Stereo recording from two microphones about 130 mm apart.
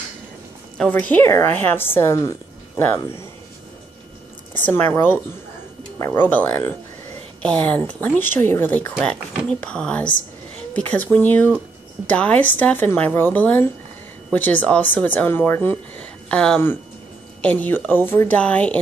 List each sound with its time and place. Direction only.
0.7 s speech: 10° left (ahead or behind)
4.6 s speech: 15° left (ahead or behind)